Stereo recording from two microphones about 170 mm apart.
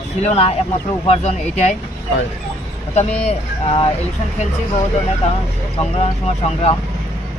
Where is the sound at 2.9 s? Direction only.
40° left (ahead or behind).